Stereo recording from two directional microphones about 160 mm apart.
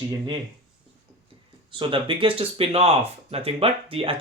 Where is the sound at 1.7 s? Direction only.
30° right (ahead or behind).